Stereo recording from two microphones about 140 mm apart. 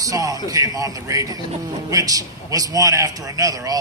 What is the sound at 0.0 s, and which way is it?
A man's voice, 25° right (ahead or behind).